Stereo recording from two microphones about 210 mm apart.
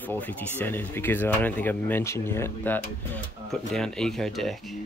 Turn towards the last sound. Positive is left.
turn(degrees=0)  # may be behind; listen again after turning